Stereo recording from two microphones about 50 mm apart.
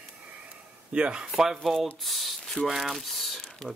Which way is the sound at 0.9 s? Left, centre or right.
Right.